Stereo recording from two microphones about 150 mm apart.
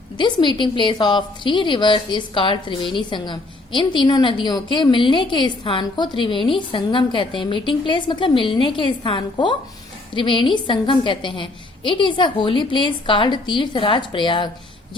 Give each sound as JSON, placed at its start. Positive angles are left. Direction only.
{"t": 0.2, "sound": "a woman's voice", "side_deg": 30}